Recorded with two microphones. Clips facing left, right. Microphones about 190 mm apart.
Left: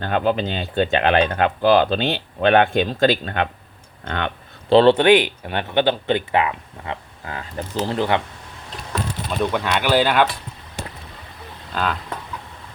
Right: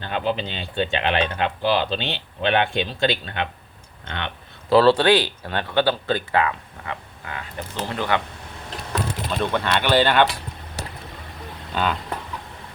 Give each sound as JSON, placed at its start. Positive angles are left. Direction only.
{"t": 0.0, "sound": "speech", "side_deg": 50}
{"t": 4.7, "sound": "speech", "side_deg": 20}
{"t": 7.3, "sound": "speech", "side_deg": 35}
{"t": 9.3, "sound": "speech", "side_deg": 10}
{"t": 11.7, "sound": "speech", "side_deg": 0}